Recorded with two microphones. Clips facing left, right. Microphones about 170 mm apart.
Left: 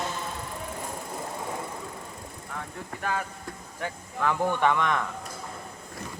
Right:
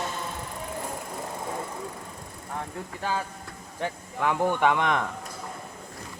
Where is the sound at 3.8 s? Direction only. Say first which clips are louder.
Right 1 dB; 15° right (ahead or behind).